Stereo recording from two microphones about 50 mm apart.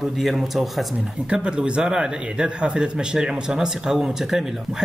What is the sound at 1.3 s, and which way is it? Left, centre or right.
Speech, centre.